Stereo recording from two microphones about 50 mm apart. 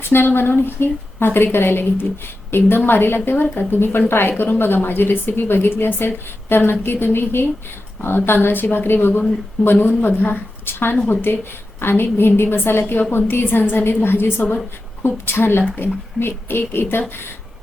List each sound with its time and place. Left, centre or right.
0.0 s a woman's voice: left
3.4 s speech: left
3.7 s a woman's voice: left